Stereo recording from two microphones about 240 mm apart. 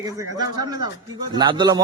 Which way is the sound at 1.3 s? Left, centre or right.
Centre.